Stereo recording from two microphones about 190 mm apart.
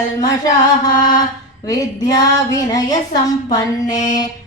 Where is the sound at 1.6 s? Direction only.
20° left (ahead or behind).